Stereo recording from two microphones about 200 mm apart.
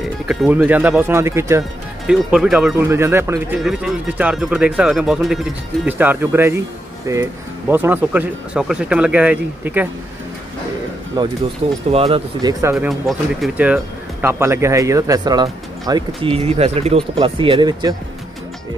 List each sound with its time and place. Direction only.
0.3 s speech: 5° right (ahead or behind)
2.0 s speech: 5° right (ahead or behind)
11.2 s speech: 20° right (ahead or behind)
13.4 s speech: 5° right (ahead or behind); by 17.9 s 20° right (ahead or behind)